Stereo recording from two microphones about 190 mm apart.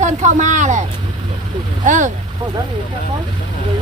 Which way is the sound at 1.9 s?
40° right (ahead or behind).